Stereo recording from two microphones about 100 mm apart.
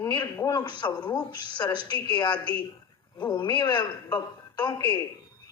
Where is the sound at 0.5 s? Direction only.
50° left (ahead or behind).